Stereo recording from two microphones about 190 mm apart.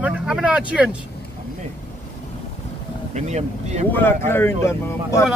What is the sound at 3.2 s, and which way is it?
Speech, 35° right (ahead or behind).